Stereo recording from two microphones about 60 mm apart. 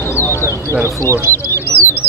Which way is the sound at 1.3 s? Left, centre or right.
Left.